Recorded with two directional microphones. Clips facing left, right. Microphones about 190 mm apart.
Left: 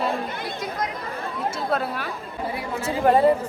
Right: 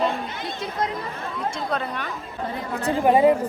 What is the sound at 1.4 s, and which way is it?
A woman's voice, 5° left (ahead or behind).